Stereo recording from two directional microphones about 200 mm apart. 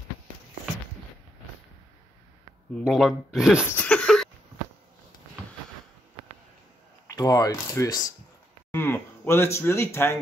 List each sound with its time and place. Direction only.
2.8 s speech: centre (ahead or behind)
3.7 s a sound: 5° left (ahead or behind)
7.1 s speech: 15° left (ahead or behind)